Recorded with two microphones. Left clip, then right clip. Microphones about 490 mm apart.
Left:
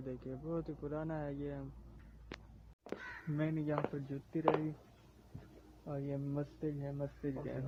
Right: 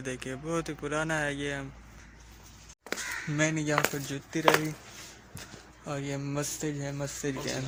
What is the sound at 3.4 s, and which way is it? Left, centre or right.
Speech, left.